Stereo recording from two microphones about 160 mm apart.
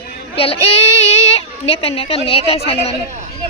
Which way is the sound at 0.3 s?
40° left (ahead or behind).